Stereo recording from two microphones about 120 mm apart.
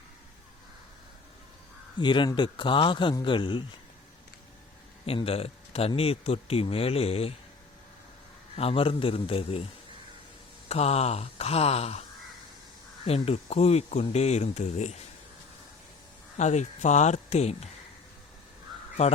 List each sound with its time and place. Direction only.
2.0 s speech: 40° left (ahead or behind)
5.0 s speech: 50° left (ahead or behind)
8.5 s speech: 50° left (ahead or behind)
10.7 s speech: 60° left (ahead or behind)
13.1 s speech: 55° left (ahead or behind)
16.4 s speech: 75° left (ahead or behind)
19.0 s speech: 55° left (ahead or behind)